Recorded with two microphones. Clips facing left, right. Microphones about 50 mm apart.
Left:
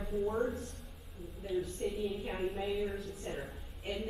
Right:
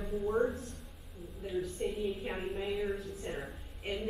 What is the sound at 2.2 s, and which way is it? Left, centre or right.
A woman's voice, centre.